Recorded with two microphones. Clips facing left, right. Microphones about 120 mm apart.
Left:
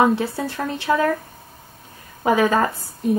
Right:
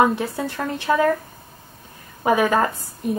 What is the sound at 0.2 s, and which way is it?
Speech, centre (ahead or behind).